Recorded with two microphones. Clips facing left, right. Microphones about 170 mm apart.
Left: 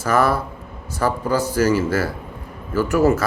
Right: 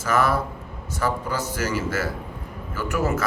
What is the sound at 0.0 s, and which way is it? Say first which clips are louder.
Speech: left 3 dB; 35° left (ahead or behind).